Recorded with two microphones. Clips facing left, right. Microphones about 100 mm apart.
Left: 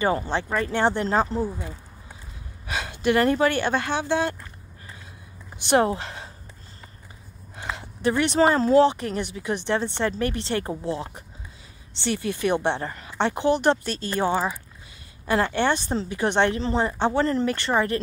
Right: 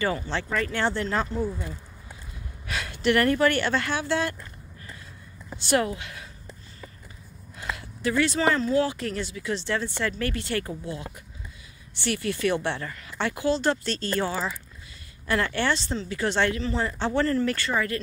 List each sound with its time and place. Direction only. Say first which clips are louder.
0.3 s speech: left 3 dB; 20° left (ahead or behind)
1.0 s speech: left 5 dB; 30° left (ahead or behind)
2.6 s speech: left 1 dB; 20° left (ahead or behind)
5.6 s speech: left 4 dB; 20° left (ahead or behind)
5.9 s speech: left 6 dB; 35° left (ahead or behind)
7.5 s a sound: left 1 dB; 25° left (ahead or behind)
8.4 s speech: left 9 dB; 35° left (ahead or behind)
8.8 s speech: left 7 dB; 20° left (ahead or behind)
12.0 s speech: left 1 dB; 20° left (ahead or behind)
16.5 s speech: left 4 dB; 30° left (ahead or behind)
17.0 s speech: even; 20° left (ahead or behind)